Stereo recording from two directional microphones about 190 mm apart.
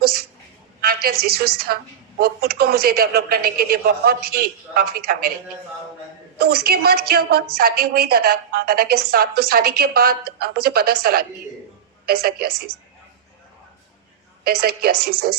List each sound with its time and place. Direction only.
0.0 s a sound: 55° right (ahead or behind)
0.8 s a woman's voice: 55° right (ahead or behind)
6.4 s a woman's voice: 55° right (ahead or behind)
14.4 s speech: 55° right (ahead or behind)